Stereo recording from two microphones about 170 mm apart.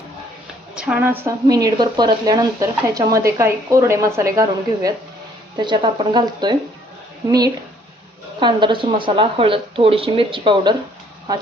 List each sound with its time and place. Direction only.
0.8 s speech: 10° right (ahead or behind)
5.5 s speech: 30° right (ahead or behind)